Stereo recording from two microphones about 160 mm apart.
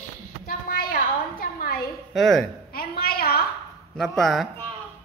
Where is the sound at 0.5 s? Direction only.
65° left (ahead or behind).